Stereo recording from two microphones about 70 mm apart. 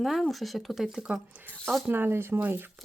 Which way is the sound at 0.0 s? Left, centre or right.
Centre.